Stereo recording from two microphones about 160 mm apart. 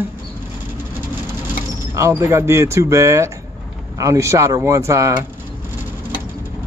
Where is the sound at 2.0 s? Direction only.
20° right (ahead or behind).